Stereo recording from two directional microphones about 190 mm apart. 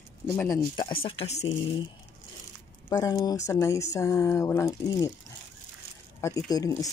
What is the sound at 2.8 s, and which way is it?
Speech, 15° left (ahead or behind).